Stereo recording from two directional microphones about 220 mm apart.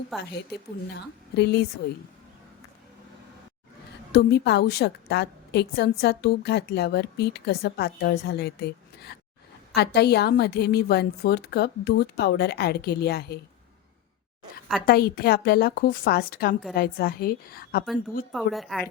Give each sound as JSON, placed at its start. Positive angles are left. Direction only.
{"t": 0.9, "sound": "a woman's voice", "side_deg": 50}
{"t": 4.1, "sound": "a woman's voice", "side_deg": 50}
{"t": 14.8, "sound": "a woman's voice", "side_deg": 45}
{"t": 18.3, "sound": "a woman's voice", "side_deg": 0}